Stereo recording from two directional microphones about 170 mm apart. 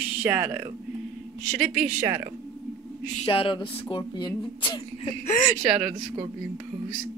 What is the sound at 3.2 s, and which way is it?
Speech, 35° left (ahead or behind).